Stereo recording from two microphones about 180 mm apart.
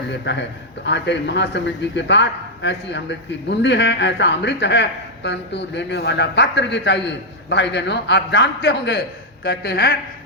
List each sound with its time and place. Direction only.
0.1 s a man's voice: 80° left